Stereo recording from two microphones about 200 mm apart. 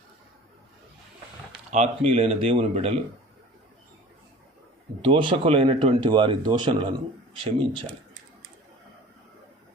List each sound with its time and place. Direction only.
1.7 s speech: 35° right (ahead or behind)
5.0 s speech: 25° right (ahead or behind)